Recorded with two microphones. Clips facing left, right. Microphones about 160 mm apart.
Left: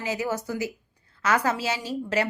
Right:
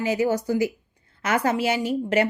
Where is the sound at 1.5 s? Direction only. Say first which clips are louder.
Right 6 dB; 30° left (ahead or behind).